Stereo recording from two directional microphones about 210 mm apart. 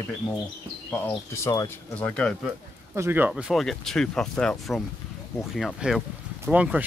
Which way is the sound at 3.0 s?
10° right (ahead or behind).